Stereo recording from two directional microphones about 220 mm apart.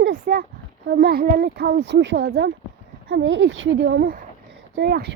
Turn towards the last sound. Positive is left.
turn(degrees=-50)  # may be behind; listen again after turning